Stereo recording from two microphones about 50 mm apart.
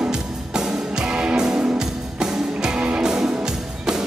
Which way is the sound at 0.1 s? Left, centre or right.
Centre.